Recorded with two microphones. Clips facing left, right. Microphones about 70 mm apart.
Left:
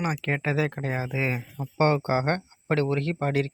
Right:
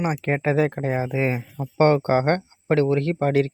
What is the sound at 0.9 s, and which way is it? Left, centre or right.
Speech, centre.